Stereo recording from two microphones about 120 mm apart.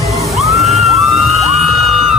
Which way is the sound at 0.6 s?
Centre (ahead or behind).